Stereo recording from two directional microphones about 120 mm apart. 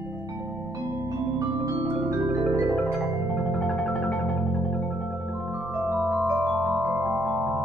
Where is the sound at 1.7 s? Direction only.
25° right (ahead or behind).